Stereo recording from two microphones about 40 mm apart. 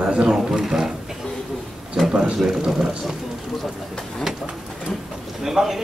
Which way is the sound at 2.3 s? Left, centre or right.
Centre.